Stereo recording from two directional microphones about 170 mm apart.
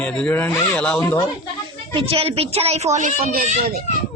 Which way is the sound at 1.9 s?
30° right (ahead or behind).